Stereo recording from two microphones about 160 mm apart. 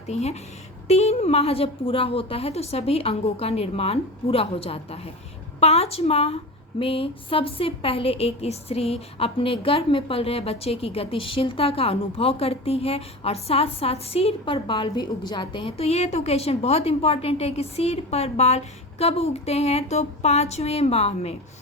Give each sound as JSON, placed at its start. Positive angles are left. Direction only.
{"t": 0.1, "sound": "a woman's voice", "side_deg": 40}